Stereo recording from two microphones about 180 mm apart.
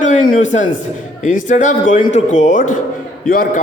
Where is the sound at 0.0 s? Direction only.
45° left (ahead or behind).